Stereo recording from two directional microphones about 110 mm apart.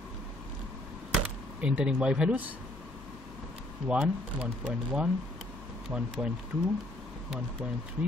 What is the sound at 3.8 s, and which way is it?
Speech, 10° right (ahead or behind).